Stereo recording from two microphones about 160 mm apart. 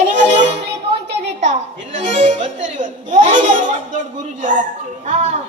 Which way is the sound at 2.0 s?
50° right (ahead or behind).